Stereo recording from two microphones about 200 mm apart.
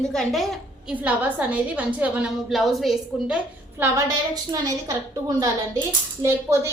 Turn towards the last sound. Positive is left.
turn(degrees=-15)  # may be behind; listen again after turning